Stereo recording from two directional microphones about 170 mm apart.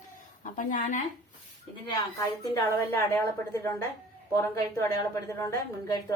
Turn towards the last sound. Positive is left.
turn(degrees=20)  # may be behind; listen again after turning